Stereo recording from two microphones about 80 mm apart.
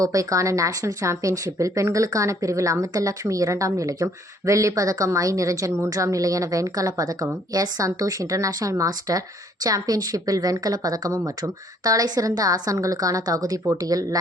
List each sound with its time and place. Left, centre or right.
0.0 s a woman's voice: right